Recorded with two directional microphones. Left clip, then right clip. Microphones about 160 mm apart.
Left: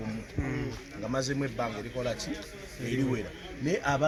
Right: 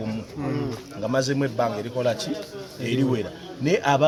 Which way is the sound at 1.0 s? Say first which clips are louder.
Right 8 dB; 5° right (ahead or behind).